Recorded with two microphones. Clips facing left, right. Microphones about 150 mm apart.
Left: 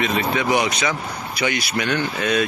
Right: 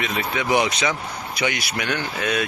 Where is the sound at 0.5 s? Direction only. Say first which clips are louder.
Even; 25° right (ahead or behind); by 2.4 s 10° right (ahead or behind).